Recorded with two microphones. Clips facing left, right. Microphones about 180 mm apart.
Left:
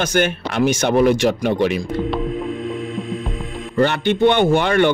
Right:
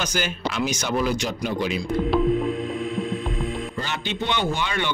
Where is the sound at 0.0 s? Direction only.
55° left (ahead or behind).